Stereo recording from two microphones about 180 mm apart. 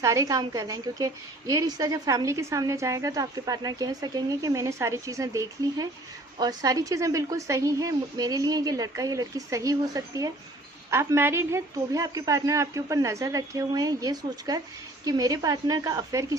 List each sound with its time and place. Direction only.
0.0 s a woman's voice: 15° right (ahead or behind)